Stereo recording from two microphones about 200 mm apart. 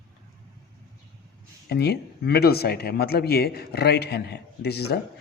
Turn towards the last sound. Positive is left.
turn(degrees=55)  # may be behind; listen again after turning